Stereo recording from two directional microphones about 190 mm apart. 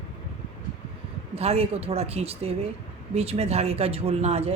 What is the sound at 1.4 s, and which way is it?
A woman's voice, 35° right (ahead or behind).